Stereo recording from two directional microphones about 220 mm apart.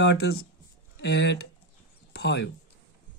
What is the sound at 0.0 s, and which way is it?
Speech, 50° left (ahead or behind).